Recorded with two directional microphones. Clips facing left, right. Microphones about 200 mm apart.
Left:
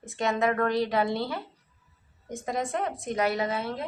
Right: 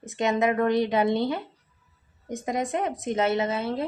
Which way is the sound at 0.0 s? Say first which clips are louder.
Right 3 dB; 20° right (ahead or behind).